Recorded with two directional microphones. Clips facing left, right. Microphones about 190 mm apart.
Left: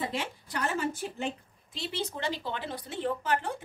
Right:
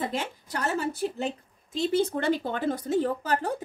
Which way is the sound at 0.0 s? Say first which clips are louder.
Right 3 dB; 45° right (ahead or behind).